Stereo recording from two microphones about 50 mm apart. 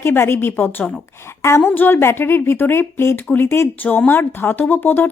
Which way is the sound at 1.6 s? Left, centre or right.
Left.